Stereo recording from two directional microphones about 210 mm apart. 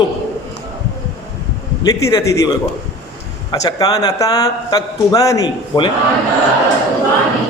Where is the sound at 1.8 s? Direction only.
15° left (ahead or behind).